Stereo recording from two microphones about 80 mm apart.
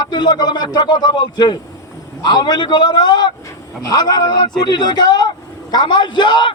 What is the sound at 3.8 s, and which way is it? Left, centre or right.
A man's voice, left.